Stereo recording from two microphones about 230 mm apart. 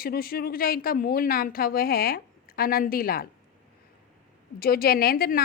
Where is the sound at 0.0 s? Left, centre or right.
Left.